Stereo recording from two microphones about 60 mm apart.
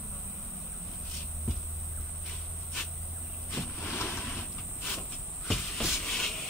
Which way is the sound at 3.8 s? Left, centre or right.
Left.